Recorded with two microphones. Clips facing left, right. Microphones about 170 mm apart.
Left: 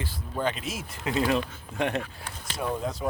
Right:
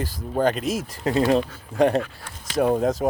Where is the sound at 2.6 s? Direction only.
55° right (ahead or behind).